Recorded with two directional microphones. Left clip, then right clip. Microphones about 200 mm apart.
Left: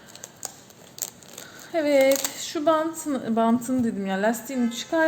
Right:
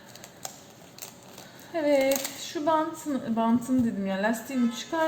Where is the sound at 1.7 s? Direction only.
55° left (ahead or behind).